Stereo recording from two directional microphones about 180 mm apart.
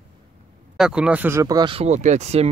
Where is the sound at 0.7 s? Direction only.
5° right (ahead or behind); by 2.5 s 35° right (ahead or behind).